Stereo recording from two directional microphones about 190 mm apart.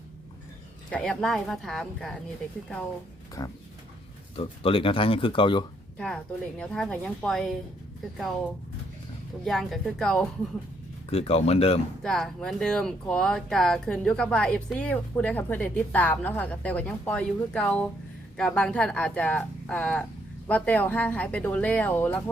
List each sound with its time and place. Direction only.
0.9 s speech: 5° left (ahead or behind)
3.4 s speech: 20° left (ahead or behind)
6.6 s speech: 5° left (ahead or behind)
9.4 s speech: centre (ahead or behind)
11.1 s speech: 30° left (ahead or behind)
12.0 s a woman's voice: centre (ahead or behind)